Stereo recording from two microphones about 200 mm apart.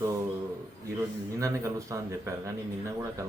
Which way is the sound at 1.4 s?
15° right (ahead or behind).